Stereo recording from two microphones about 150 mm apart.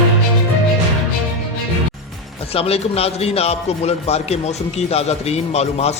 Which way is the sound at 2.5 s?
40° left (ahead or behind).